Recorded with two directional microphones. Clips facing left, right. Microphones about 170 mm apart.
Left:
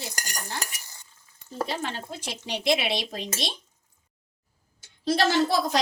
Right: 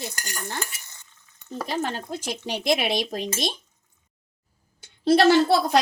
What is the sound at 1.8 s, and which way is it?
A woman's voice, 45° right (ahead or behind).